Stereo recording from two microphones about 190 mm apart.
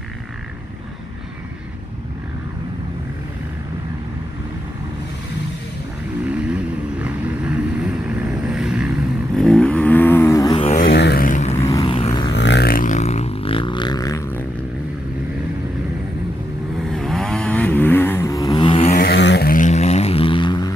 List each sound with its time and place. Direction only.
6.2 s vehicle: 5° right (ahead or behind); by 10.7 s 20° left (ahead or behind)
10.9 s vehicle: 60° left (ahead or behind); by 11.5 s 40° left (ahead or behind)
11.6 s vehicle: 20° left (ahead or behind)
12.4 s didgeridoo: 60° left (ahead or behind); by 14.2 s 20° left (ahead or behind)
16.9 s vehicle: centre (ahead or behind); by 18.9 s 30° left (ahead or behind)
18.9 s vehicle: 60° left (ahead or behind); by 20.7 s 25° left (ahead or behind)